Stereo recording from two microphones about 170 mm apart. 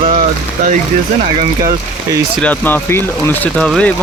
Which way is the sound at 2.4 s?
10° left (ahead or behind).